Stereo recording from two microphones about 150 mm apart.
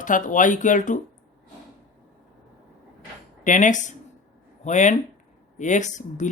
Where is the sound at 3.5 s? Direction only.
55° left (ahead or behind).